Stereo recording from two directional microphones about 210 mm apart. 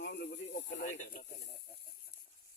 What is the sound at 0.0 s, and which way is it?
Snake, 55° left (ahead or behind).